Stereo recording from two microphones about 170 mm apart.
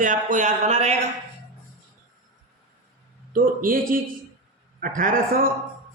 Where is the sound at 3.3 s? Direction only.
55° right (ahead or behind).